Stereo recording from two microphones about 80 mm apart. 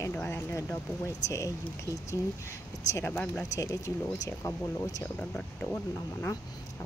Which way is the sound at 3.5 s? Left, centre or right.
Left.